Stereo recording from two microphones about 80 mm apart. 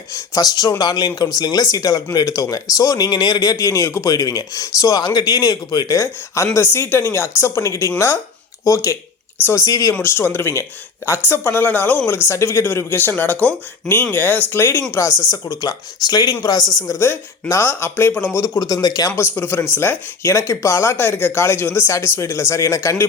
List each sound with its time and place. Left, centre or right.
0.1 s speech: left
3.1 s speech: left
6.0 s speech: left
10.0 s speech: left
15.3 s speech: left
17.5 s speech: left
18.3 s speech: left
19.1 s speech: left
20.5 s speech: left